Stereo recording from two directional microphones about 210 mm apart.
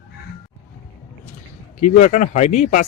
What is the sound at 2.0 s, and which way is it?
Speech, 35° left (ahead or behind).